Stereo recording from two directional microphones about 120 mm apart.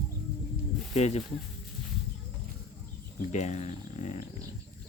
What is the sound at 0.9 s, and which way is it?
Speech, 65° left (ahead or behind).